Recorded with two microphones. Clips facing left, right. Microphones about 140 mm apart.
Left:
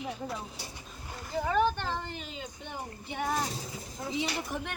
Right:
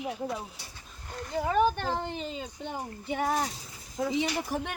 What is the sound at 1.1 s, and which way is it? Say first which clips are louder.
Speech: right 2 dB; centre (ahead or behind).